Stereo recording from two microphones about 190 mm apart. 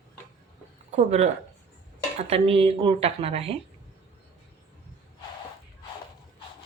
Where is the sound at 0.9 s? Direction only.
35° right (ahead or behind).